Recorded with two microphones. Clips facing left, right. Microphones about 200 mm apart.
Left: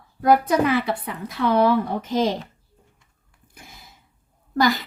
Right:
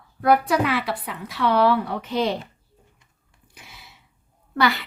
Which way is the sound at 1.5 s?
45° left (ahead or behind).